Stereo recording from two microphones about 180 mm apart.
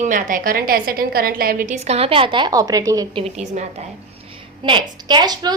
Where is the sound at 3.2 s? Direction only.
40° right (ahead or behind).